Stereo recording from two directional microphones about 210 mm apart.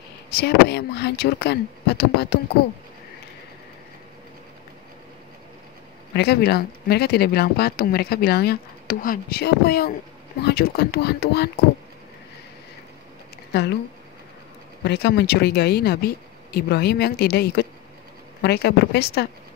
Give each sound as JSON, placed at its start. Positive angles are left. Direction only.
{"t": 0.3, "sound": "speech", "side_deg": 50}
{"t": 6.1, "sound": "speech", "side_deg": 50}
{"t": 13.5, "sound": "speech", "side_deg": 55}
{"t": 14.9, "sound": "speech", "side_deg": 50}